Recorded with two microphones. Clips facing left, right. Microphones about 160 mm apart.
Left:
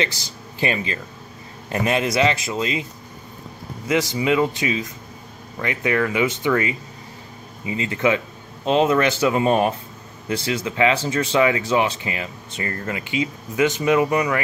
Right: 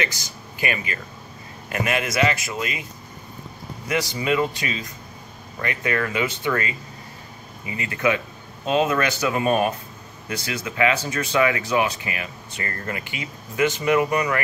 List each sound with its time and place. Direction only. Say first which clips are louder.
0.2 s speech: left 4 dB; 25° left (ahead or behind)
4.1 s speech: left 3 dB; 20° left (ahead or behind)